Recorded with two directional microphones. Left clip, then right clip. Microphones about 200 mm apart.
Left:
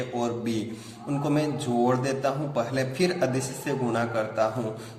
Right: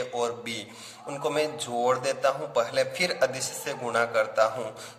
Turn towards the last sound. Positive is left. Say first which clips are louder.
# right 2 dB
turn(degrees=-35)  # may be behind; listen again after turning